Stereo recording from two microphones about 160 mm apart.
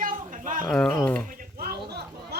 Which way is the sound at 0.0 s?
55° right (ahead or behind).